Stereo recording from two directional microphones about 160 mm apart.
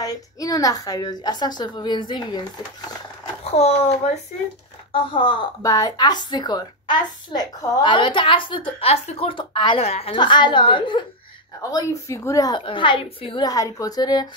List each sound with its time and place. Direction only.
0.0 s a woman's voice: 20° left (ahead or behind)
3.4 s a woman's voice: 40° left (ahead or behind)
4.9 s a woman's voice: 30° left (ahead or behind)
11.7 s a woman's voice: 20° left (ahead or behind)